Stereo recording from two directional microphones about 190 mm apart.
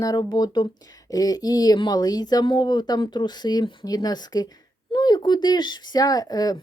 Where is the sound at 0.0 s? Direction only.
20° left (ahead or behind).